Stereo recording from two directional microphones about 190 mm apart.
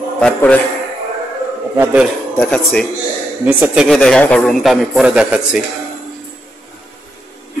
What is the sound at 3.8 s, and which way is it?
A man's voice, 5° left (ahead or behind).